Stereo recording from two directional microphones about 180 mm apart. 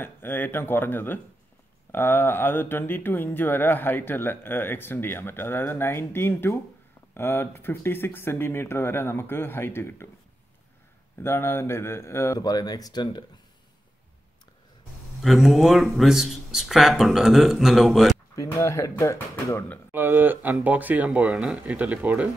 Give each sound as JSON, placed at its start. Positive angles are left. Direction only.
{"t": 0.0, "sound": "speech", "side_deg": 10}
{"t": 11.1, "sound": "speech", "side_deg": 15}
{"t": 15.2, "sound": "speech", "side_deg": 0}
{"t": 18.3, "sound": "speech", "side_deg": 15}
{"t": 19.9, "sound": "speech", "side_deg": -10}